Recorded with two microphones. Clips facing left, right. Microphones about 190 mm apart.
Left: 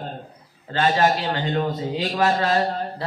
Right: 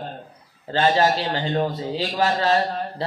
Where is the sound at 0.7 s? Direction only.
30° right (ahead or behind).